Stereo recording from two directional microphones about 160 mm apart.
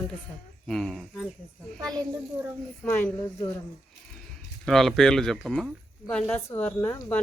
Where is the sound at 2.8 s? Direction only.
10° left (ahead or behind).